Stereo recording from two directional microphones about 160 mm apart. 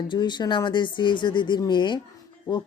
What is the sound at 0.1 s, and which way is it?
Speech, 30° left (ahead or behind).